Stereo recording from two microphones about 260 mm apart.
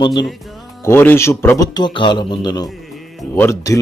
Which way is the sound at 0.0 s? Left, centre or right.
Centre.